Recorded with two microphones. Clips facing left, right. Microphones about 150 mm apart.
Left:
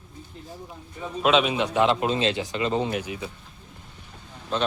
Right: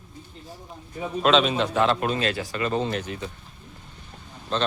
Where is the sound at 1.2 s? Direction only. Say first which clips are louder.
Right 1 dB; 10° left (ahead or behind).